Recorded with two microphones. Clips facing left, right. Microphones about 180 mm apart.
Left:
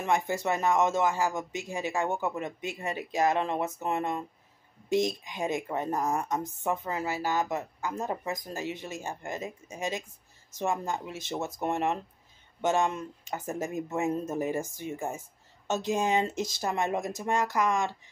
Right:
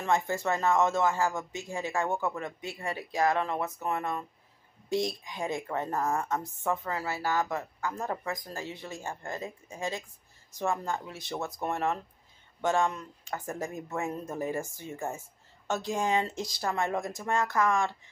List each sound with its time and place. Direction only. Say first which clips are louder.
0.0 s speech: even; 15° left (ahead or behind)